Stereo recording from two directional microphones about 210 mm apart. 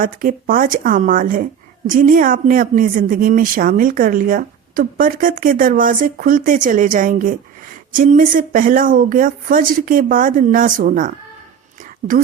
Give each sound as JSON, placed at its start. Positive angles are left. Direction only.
{"t": 0.0, "sound": "speech", "side_deg": -40}